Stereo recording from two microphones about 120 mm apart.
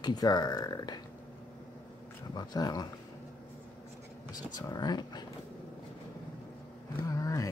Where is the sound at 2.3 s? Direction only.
35° left (ahead or behind).